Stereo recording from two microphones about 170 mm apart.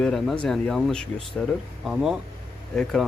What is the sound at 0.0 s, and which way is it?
Speech, 5° left (ahead or behind).